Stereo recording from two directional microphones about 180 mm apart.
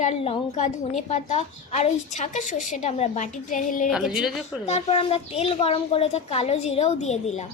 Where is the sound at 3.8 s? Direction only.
Centre (ahead or behind).